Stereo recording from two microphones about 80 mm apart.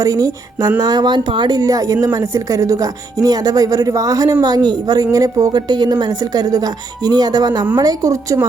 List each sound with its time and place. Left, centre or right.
0.0 s speech: right
0.8 s speech: right
1.5 s speech: right